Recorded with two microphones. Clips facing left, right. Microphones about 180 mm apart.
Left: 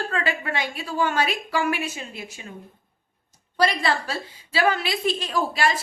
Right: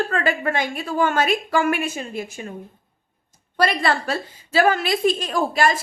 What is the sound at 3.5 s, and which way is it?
A woman's voice, 55° right (ahead or behind).